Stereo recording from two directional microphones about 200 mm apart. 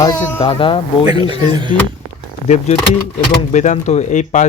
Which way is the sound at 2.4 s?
35° left (ahead or behind).